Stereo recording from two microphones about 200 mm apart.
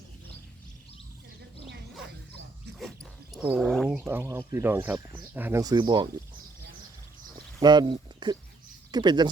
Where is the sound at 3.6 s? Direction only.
5° left (ahead or behind).